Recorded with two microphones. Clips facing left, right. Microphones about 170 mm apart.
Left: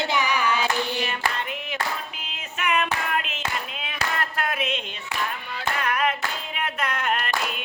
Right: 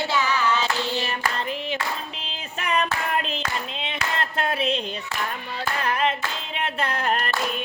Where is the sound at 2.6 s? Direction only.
35° right (ahead or behind).